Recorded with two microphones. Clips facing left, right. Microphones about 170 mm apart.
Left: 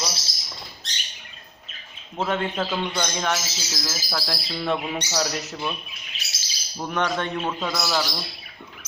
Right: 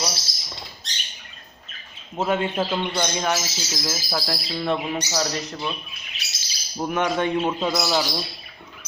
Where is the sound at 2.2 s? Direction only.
10° right (ahead or behind).